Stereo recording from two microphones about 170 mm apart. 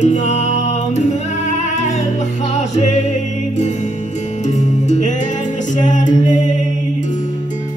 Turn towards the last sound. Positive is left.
turn(degrees=50)  # may be behind; listen again after turning